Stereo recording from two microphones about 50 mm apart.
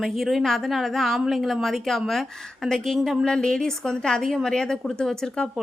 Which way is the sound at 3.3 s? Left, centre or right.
Centre.